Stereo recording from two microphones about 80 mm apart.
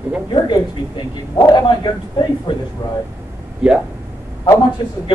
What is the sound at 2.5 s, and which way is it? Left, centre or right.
Speech, left.